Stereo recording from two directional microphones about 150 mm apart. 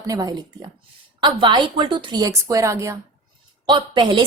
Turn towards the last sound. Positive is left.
turn(degrees=-30)  # may be behind; listen again after turning